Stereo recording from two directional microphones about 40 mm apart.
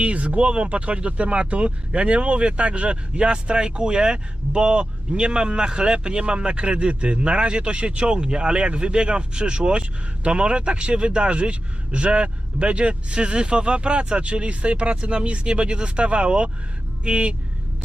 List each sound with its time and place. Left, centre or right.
0.0 s speech: right